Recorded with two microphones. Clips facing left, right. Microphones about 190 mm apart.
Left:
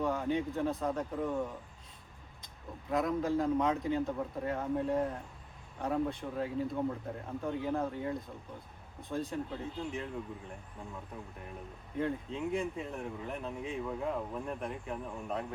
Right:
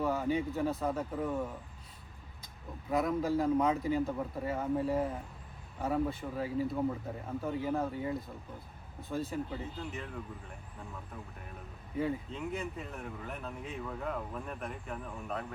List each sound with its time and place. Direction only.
0.0 s a man's voice: 5° right (ahead or behind)
2.9 s a man's voice: 5° right (ahead or behind)
11.9 s a man's voice: 5° right (ahead or behind)